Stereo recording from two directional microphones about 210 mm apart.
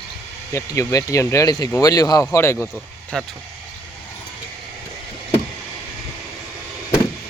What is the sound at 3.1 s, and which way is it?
Speech, centre (ahead or behind).